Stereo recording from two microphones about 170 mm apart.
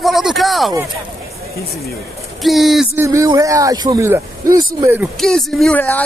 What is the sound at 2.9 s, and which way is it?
Speech, 15° right (ahead or behind).